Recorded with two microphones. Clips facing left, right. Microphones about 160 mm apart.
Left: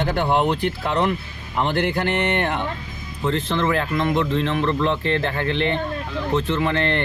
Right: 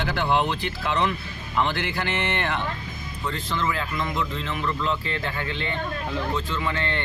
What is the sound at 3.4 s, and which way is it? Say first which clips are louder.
Speech: left 6 dB; 65° left (ahead or behind).